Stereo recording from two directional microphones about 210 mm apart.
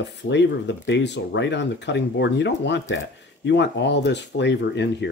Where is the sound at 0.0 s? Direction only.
55° left (ahead or behind).